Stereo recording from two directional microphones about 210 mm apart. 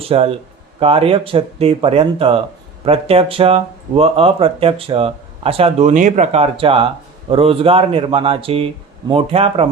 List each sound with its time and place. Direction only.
0.1 s speech: 25° right (ahead or behind)